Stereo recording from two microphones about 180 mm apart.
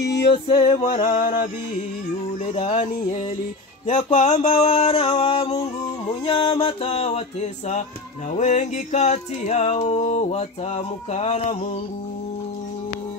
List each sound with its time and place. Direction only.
0.3 s music: 35° left (ahead or behind)